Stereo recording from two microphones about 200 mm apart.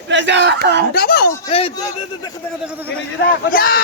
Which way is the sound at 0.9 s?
50° left (ahead or behind).